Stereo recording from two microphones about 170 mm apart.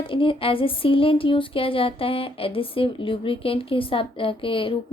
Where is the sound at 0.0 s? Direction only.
30° left (ahead or behind).